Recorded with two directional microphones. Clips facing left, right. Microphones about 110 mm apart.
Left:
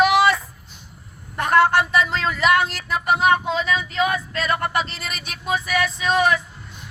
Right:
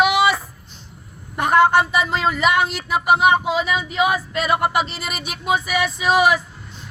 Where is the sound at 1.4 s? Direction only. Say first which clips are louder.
Right 2 dB; centre (ahead or behind).